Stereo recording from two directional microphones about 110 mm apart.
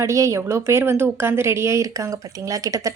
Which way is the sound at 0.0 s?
30° right (ahead or behind).